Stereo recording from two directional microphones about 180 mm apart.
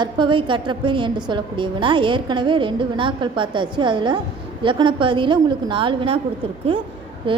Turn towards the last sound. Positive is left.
turn(degrees=-25)  # may be behind; listen again after turning